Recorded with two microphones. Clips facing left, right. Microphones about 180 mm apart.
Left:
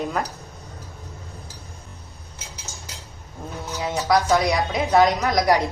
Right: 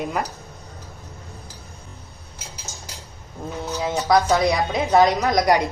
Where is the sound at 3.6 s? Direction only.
15° right (ahead or behind).